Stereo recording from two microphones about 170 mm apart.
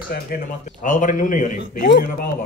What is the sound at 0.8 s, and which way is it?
Speech, 50° left (ahead or behind).